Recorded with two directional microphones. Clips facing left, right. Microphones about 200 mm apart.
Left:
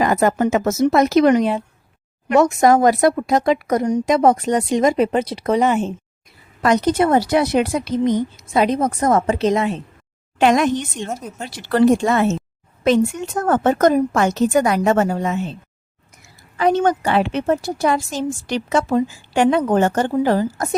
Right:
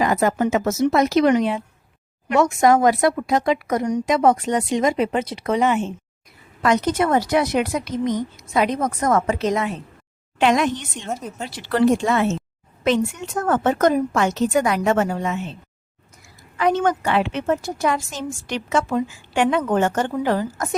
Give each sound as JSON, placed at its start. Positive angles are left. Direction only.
{"t": 0.0, "sound": "a woman's voice", "side_deg": 50}
{"t": 10.3, "sound": "speech", "side_deg": 45}
{"t": 11.1, "sound": "speech", "side_deg": 0}
{"t": 11.4, "sound": "a woman's voice", "side_deg": 45}